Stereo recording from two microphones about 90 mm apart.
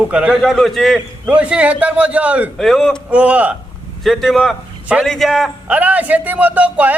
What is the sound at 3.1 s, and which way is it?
Speech, 15° right (ahead or behind).